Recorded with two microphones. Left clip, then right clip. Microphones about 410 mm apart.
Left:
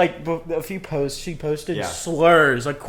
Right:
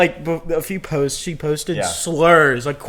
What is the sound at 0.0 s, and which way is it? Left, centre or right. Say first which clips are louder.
Speech: right 3 dB; centre.